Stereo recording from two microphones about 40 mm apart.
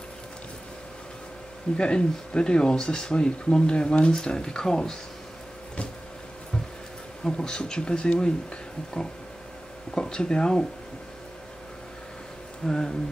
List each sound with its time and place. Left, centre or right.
1.8 s speech: left
7.2 s speech: centre
9.9 s speech: left
12.6 s speech: centre